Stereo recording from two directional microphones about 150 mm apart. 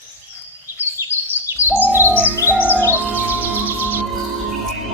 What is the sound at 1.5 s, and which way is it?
Bird, 15° right (ahead or behind).